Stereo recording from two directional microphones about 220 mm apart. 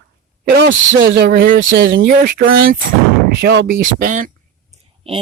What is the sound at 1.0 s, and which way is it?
Speech, 40° right (ahead or behind).